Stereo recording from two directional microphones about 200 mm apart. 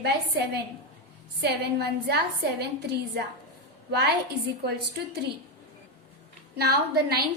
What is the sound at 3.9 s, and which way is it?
Speech, 55° right (ahead or behind).